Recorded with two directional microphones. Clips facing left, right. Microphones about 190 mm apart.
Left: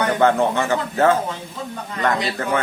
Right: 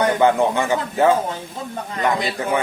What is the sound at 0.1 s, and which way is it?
A man's voice, 15° right (ahead or behind).